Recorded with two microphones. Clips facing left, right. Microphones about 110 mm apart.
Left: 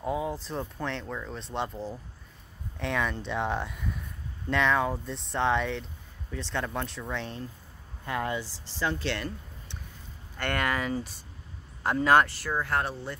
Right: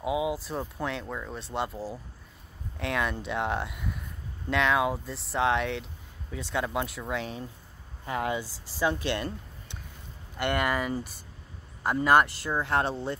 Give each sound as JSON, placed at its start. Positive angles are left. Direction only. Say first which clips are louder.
{"t": 0.0, "sound": "speech", "louder": "right 2 dB", "side_deg": -10}
{"t": 12.4, "sound": "speech", "louder": "right 2 dB", "side_deg": -20}